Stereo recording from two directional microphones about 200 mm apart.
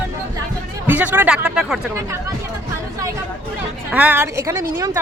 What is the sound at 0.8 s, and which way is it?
Speech, 10° right (ahead or behind).